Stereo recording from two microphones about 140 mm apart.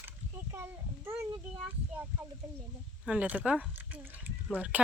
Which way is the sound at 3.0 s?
10° right (ahead or behind).